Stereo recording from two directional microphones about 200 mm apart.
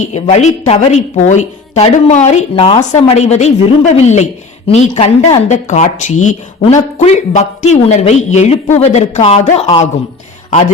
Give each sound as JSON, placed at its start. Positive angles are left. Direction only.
{"t": 0.0, "sound": "speech", "side_deg": 35}